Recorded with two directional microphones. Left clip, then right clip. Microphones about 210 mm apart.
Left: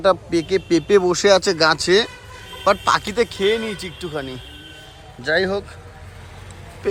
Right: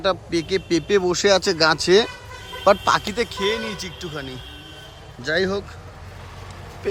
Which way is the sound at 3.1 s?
Centre (ahead or behind).